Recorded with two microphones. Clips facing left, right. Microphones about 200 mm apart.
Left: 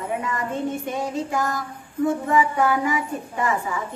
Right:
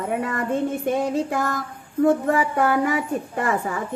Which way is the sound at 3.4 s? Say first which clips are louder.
Left 1 dB; 55° right (ahead or behind).